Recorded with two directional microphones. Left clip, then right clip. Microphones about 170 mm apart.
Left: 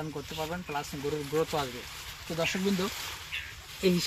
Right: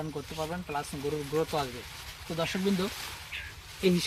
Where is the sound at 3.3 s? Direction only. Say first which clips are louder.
Left 3 dB; 25° right (ahead or behind).